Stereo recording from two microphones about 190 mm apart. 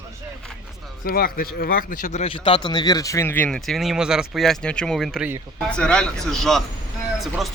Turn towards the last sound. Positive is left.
turn(degrees=0)  # may be behind; listen again after turning